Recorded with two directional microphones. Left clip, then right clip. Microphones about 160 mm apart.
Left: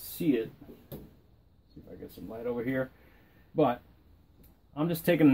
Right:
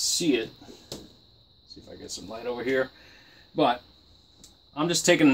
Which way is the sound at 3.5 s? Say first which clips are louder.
Right 3 dB; 20° left (ahead or behind).